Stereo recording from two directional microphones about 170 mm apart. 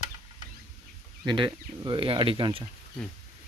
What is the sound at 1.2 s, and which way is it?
Speech, 25° right (ahead or behind).